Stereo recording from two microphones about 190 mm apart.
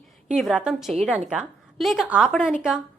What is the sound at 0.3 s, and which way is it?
A woman's voice, 5° right (ahead or behind).